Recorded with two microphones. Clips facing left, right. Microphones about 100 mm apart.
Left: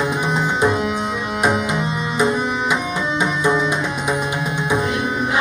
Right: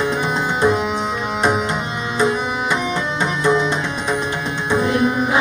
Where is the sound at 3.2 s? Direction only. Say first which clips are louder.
Right 1 dB; 10° left (ahead or behind).